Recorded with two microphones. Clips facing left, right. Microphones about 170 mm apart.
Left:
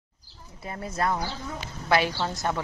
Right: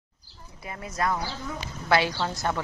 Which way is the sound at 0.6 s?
30° left (ahead or behind).